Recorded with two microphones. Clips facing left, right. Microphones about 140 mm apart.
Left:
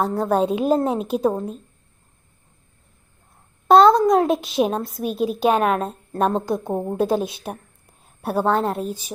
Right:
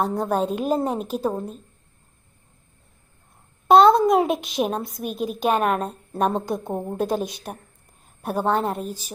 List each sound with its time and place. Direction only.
0.0 s a woman's voice: centre (ahead or behind)
0.6 s a woman's voice: 5° right (ahead or behind)
0.9 s a woman's voice: 5° left (ahead or behind)
1.4 s a woman's voice: centre (ahead or behind)
3.7 s a woman's voice: centre (ahead or behind)
8.0 s a sound: 5° left (ahead or behind)
8.4 s a woman's voice: 5° right (ahead or behind)